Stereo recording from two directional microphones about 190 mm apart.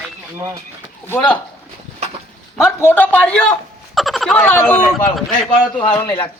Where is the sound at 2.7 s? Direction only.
10° left (ahead or behind).